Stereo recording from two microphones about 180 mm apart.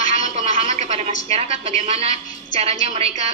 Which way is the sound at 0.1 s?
35° right (ahead or behind).